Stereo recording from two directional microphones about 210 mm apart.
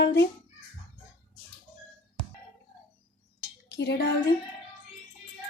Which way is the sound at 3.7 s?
50° left (ahead or behind).